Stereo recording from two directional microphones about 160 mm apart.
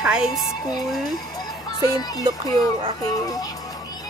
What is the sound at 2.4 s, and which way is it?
Speech, 20° left (ahead or behind).